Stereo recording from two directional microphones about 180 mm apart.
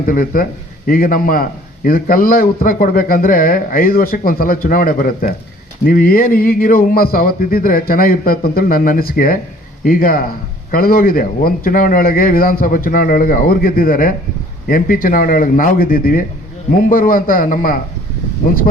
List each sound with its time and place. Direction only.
0.0 s a man's voice: 50° left (ahead or behind)